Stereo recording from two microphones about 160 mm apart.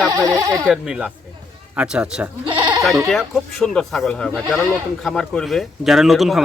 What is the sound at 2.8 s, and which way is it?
Speech, centre (ahead or behind).